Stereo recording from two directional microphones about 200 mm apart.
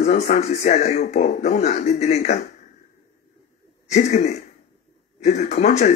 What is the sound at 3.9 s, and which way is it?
A man's voice, 35° left (ahead or behind).